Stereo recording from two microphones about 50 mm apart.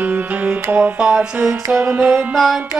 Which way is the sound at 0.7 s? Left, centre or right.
Right.